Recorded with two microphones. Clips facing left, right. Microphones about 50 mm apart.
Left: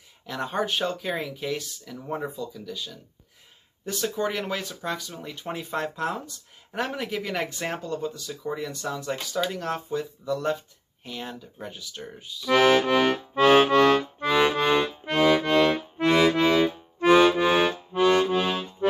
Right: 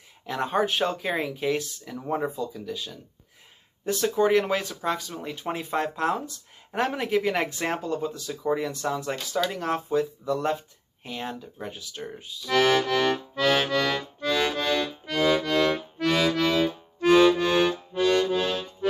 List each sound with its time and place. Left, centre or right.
0.3 s speech: centre
9.5 s speech: centre
12.4 s accordion: centre